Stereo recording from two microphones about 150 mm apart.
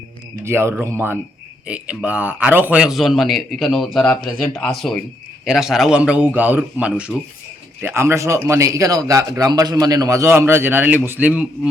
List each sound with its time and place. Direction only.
0.4 s a man's voice: 15° right (ahead or behind)